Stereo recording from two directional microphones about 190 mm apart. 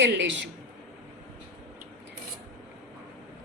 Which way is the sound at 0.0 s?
70° right (ahead or behind).